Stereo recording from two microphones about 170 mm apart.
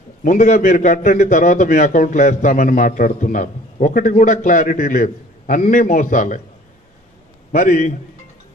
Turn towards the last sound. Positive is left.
turn(degrees=50)  # may be behind; listen again after turning